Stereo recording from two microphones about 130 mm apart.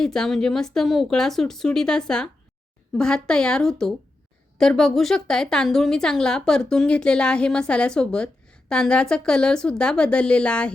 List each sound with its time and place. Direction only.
0.0 s a woman's voice: 5° left (ahead or behind)